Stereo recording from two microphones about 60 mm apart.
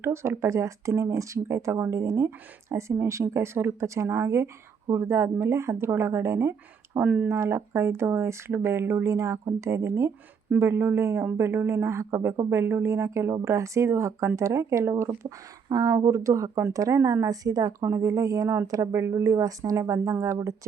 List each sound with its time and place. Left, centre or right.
0.0 s speech: right
7.0 s speech: right
7.3 s speech: right
9.0 s speech: right
10.6 s speech: right
15.7 s a woman's voice: right
17.8 s speech: right
19.8 s speech: right